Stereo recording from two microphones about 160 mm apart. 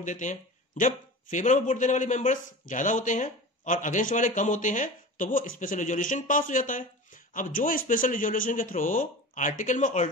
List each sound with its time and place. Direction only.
0.0 s a man's voice: 50° left (ahead or behind)